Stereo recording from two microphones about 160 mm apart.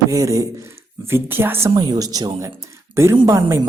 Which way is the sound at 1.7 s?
25° right (ahead or behind).